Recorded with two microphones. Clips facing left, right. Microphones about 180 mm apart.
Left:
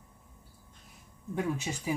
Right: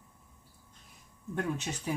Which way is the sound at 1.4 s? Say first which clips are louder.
Left 1 dB; 5° left (ahead or behind).